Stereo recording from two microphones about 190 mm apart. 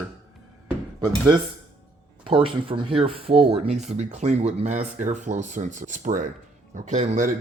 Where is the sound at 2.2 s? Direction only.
30° right (ahead or behind).